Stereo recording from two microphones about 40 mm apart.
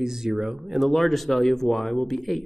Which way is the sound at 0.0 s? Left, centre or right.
Centre.